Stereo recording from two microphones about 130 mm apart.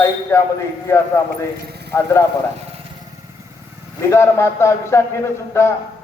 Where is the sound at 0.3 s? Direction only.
20° left (ahead or behind).